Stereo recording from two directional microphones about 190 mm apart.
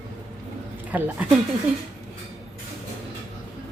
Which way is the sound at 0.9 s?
10° right (ahead or behind).